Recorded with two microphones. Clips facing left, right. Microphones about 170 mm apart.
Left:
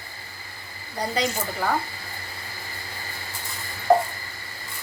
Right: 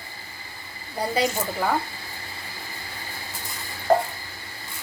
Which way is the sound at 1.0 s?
5° right (ahead or behind).